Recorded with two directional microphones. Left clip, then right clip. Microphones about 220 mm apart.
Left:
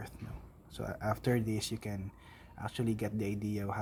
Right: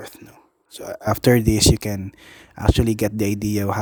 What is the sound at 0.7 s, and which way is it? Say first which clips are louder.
Speech: right 12 dB; 55° right (ahead or behind).